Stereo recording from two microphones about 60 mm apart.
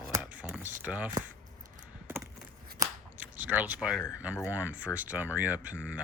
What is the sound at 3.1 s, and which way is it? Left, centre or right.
Biting, right.